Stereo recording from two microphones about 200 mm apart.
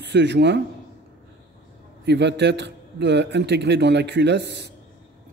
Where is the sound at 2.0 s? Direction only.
60° right (ahead or behind).